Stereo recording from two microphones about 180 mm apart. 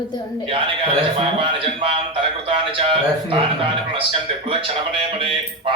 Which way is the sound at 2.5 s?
30° right (ahead or behind).